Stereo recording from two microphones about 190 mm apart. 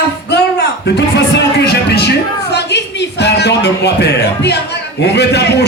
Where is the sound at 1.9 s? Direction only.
60° left (ahead or behind).